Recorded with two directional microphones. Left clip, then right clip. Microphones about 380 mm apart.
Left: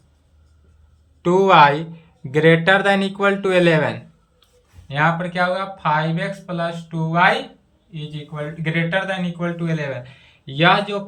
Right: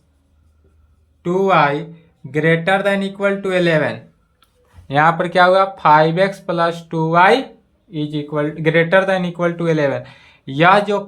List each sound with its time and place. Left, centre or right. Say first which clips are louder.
1.2 s speech: left 2 dB; centre
4.9 s speech: right 5 dB; centre